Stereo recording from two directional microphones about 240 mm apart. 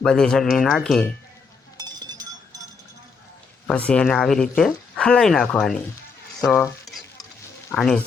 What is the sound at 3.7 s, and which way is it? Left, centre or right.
Speech, centre.